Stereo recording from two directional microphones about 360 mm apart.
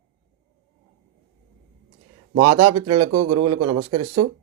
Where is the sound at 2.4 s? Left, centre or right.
Right.